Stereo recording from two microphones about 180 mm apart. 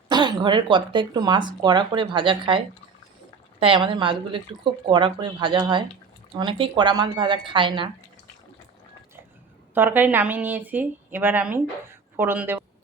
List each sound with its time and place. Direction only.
0.1 s speech: 25° right (ahead or behind)
9.7 s a woman's voice: 10° right (ahead or behind)